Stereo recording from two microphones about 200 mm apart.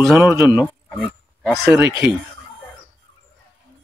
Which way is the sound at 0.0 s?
Centre (ahead or behind).